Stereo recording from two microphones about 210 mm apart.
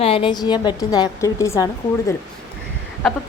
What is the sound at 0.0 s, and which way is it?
A woman's voice, 25° left (ahead or behind).